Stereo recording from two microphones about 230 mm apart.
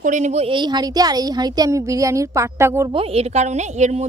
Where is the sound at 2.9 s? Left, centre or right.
Right.